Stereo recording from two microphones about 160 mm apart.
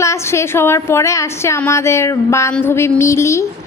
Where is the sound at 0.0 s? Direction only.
15° left (ahead or behind).